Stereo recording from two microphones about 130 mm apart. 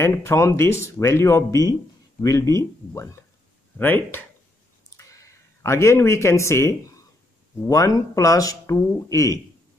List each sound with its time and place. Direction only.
0.0 s speech: 20° left (ahead or behind)
4.8 s a sound: 25° left (ahead or behind)
7.6 s speech: 25° left (ahead or behind)